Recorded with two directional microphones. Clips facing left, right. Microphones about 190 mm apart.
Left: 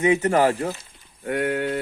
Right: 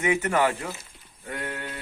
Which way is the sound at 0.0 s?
30° left (ahead or behind).